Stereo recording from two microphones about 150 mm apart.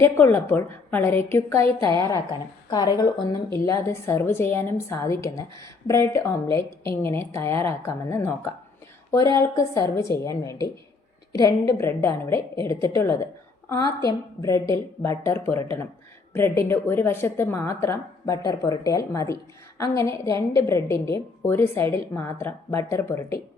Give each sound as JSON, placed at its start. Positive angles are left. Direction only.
{"t": 0.0, "sound": "a woman's voice", "side_deg": 15}